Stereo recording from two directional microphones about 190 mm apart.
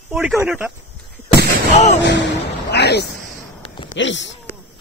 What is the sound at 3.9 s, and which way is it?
Speech, 75° left (ahead or behind).